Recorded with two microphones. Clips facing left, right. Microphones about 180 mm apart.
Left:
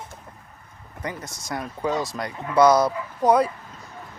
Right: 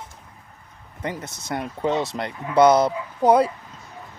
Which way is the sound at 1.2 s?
60° right (ahead or behind).